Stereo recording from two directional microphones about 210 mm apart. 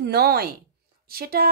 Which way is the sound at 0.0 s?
50° right (ahead or behind).